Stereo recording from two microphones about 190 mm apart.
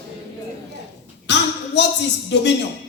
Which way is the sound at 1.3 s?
65° left (ahead or behind).